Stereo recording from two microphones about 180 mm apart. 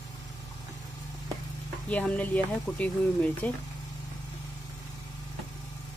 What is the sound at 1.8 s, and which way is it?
Speech, 5° left (ahead or behind).